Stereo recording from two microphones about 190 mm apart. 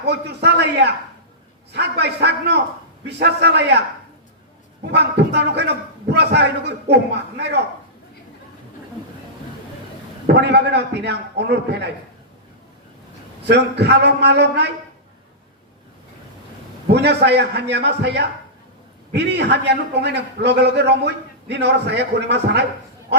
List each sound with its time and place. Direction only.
0.0 s a man's voice: 60° right (ahead or behind)
4.9 s a man's voice: 60° right (ahead or behind)
10.2 s a man's voice: 60° right (ahead or behind)
13.5 s a man's voice: 60° right (ahead or behind)
16.9 s a man's voice: 60° right (ahead or behind)